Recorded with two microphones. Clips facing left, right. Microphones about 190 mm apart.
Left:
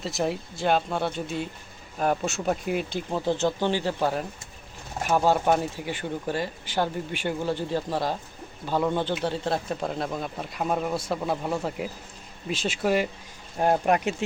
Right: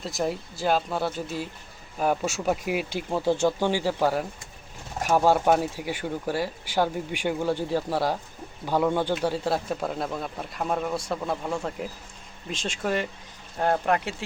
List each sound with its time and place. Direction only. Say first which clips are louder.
0.0 s speech: left 1 dB; centre (ahead or behind); by 14.2 s 15° left (ahead or behind)